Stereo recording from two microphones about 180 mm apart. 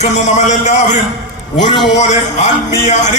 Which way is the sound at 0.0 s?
40° left (ahead or behind).